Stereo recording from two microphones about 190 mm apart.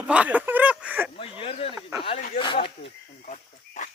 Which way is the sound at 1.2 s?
30° left (ahead or behind).